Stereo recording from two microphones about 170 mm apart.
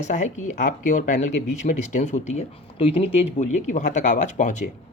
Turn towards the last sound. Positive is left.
turn(degrees=45)  # may be behind; listen again after turning